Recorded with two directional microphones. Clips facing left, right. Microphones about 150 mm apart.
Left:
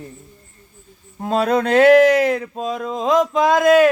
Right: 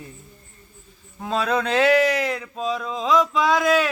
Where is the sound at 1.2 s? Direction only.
45° left (ahead or behind).